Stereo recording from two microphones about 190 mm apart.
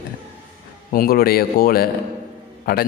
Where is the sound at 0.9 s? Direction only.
50° left (ahead or behind).